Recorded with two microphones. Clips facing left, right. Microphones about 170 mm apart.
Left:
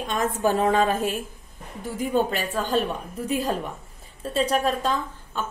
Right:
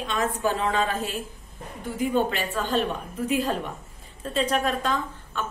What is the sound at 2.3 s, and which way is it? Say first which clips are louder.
A woman's voice: left 1 dB; 40° left (ahead or behind).